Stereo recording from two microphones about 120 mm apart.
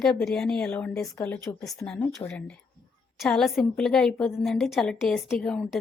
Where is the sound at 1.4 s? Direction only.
25° left (ahead or behind).